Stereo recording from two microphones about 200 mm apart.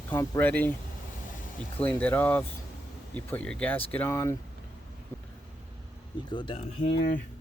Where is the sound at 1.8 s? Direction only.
10° left (ahead or behind).